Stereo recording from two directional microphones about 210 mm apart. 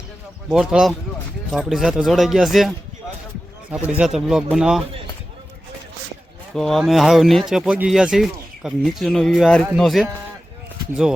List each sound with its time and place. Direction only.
0.5 s speech: centre (ahead or behind)
6.5 s speech: centre (ahead or behind)